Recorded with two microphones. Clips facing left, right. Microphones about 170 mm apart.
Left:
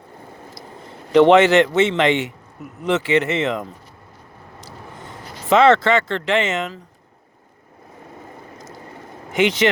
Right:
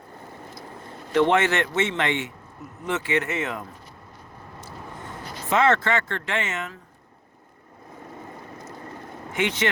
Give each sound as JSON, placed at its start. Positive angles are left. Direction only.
{"t": 1.1, "sound": "speech", "side_deg": 90}
{"t": 5.5, "sound": "speech", "side_deg": 85}
{"t": 9.3, "sound": "speech", "side_deg": 90}